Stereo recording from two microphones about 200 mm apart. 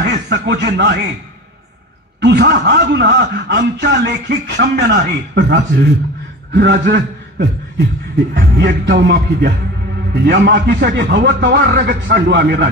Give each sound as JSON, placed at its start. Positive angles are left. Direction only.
{"t": 0.0, "sound": "speech", "side_deg": -60}
{"t": 2.2, "sound": "a man's voice", "side_deg": -55}